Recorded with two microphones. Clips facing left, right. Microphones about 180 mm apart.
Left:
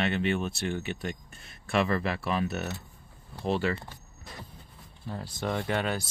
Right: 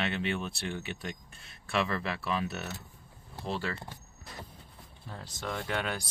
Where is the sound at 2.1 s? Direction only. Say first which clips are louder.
Left 3 dB; 50° left (ahead or behind).